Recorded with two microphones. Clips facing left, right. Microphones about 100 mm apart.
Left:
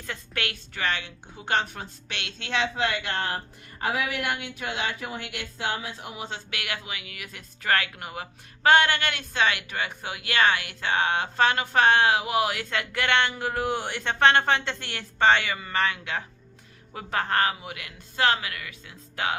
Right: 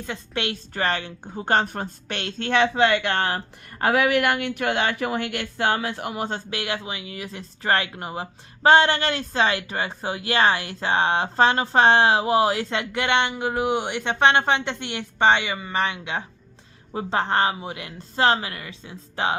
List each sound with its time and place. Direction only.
0.0 s speech: 20° right (ahead or behind)
0.7 s a woman's voice: 40° right (ahead or behind); by 6.4 s 55° right (ahead or behind)
6.5 s speech: 30° right (ahead or behind)